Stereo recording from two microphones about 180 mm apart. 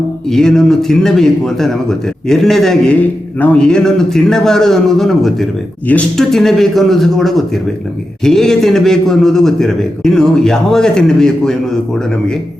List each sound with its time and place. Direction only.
0.3 s a man's voice: centre (ahead or behind)